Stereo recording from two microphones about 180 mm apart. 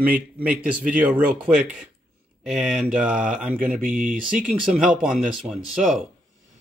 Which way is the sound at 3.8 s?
45° right (ahead or behind).